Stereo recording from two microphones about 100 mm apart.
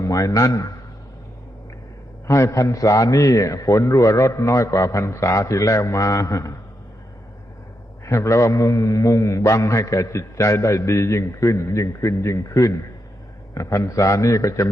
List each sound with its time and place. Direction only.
0.0 s a man's voice: 35° left (ahead or behind)
2.2 s a man's voice: 30° left (ahead or behind)
8.0 s a man's voice: 30° left (ahead or behind)